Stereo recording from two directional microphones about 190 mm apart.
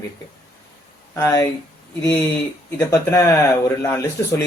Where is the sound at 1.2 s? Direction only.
15° left (ahead or behind).